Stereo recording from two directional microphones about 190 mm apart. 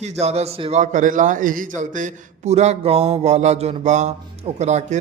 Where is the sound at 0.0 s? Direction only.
35° right (ahead or behind).